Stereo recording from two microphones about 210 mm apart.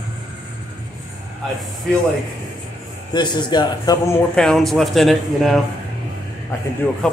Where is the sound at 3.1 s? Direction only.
20° left (ahead or behind).